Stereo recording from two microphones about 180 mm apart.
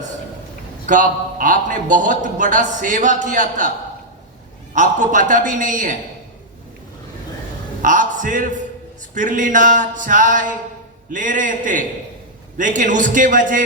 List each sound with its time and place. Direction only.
0.9 s a man's voice: 45° right (ahead or behind)
4.7 s a man's voice: 45° right (ahead or behind)
7.8 s a man's voice: 45° right (ahead or behind)